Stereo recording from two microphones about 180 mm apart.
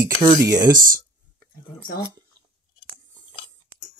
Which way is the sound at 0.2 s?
15° right (ahead or behind).